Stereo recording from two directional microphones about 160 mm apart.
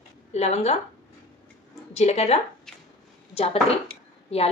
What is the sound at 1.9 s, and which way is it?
A woman's voice, 40° left (ahead or behind).